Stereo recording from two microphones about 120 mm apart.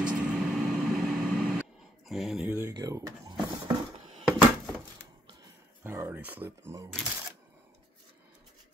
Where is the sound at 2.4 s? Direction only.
20° right (ahead or behind).